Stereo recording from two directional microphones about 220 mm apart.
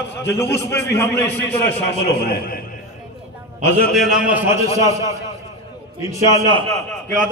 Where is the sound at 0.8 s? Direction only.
10° left (ahead or behind).